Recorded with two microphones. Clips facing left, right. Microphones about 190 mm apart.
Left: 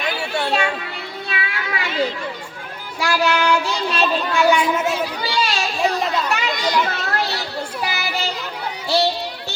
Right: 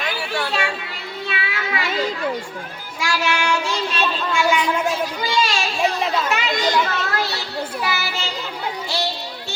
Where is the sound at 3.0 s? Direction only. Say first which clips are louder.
Left 4 dB; 35° left (ahead or behind).